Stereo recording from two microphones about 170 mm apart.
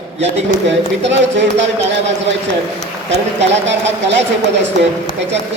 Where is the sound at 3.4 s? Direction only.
90° right.